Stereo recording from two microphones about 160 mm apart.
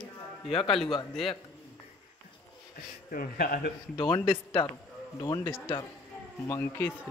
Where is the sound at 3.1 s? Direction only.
70° left (ahead or behind).